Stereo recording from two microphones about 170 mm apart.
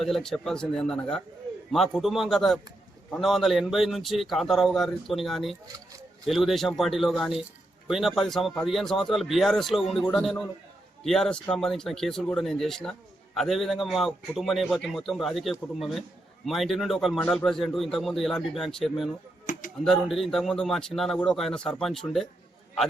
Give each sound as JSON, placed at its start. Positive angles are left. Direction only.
{"t": 0.0, "sound": "speech", "side_deg": 0}
{"t": 19.5, "sound": "a sound", "side_deg": 50}
{"t": 19.8, "sound": "speech", "side_deg": 0}